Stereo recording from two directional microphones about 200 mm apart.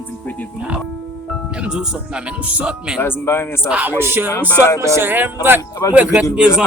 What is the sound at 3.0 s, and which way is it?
Speech, 10° left (ahead or behind).